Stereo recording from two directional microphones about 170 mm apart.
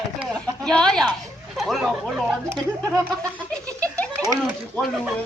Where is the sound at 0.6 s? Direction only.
5° left (ahead or behind).